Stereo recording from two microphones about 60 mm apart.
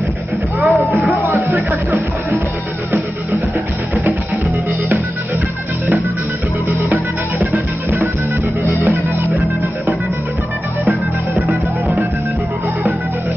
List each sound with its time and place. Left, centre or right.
0.7 s music: centre
7.5 s music: right